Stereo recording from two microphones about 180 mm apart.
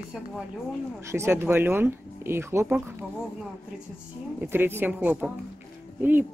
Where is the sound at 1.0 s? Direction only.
15° right (ahead or behind).